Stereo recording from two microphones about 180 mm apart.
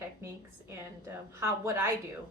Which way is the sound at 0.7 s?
15° right (ahead or behind).